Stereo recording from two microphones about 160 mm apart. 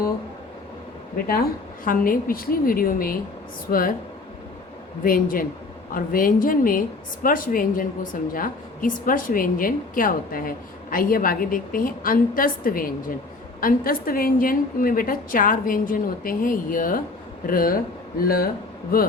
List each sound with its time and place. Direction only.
1.3 s a woman's voice: 65° left (ahead or behind)
5.0 s a woman's voice: 60° left (ahead or behind)